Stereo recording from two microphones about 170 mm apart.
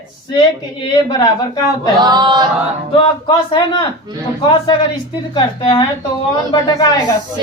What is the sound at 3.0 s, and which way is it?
A man's voice, 25° left (ahead or behind).